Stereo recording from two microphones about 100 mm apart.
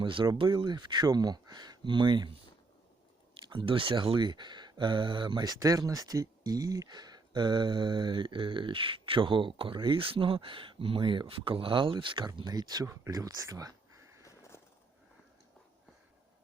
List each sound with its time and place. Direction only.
0.0 s speech: 55° right (ahead or behind)
3.5 s speech: 55° right (ahead or behind)
5.5 s speech: 35° right (ahead or behind); by 12.3 s 55° right (ahead or behind)
12.4 s speech: 45° right (ahead or behind)
12.8 s speech: 25° right (ahead or behind)
13.1 s speech: 40° right (ahead or behind)
13.5 s a sound: 35° right (ahead or behind)
14.3 s a sound: 30° left (ahead or behind)